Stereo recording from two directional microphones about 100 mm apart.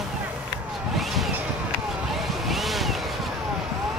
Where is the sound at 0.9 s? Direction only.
Centre (ahead or behind).